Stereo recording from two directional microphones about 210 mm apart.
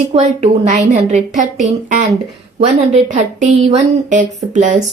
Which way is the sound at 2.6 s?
35° right (ahead or behind).